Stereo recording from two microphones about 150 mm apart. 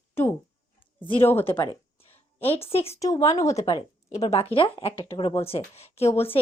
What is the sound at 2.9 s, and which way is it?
Speech, 20° left (ahead or behind).